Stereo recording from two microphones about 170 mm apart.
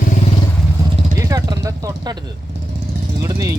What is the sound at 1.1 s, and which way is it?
Vehicle, 20° right (ahead or behind).